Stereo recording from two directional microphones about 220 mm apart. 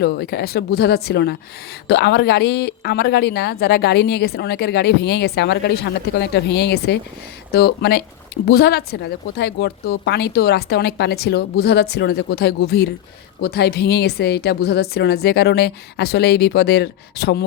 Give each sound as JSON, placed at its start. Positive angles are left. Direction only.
{"t": 0.0, "sound": "speech", "side_deg": 45}